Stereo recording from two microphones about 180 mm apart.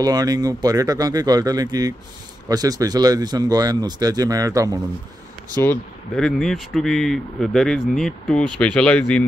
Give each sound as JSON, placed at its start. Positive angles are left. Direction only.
{"t": 0.0, "sound": "speech", "side_deg": -20}
{"t": 5.6, "sound": "speech", "side_deg": 10}
{"t": 6.2, "sound": "speech", "side_deg": 0}